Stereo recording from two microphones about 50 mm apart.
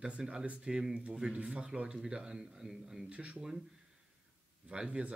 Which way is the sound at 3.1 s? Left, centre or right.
Right.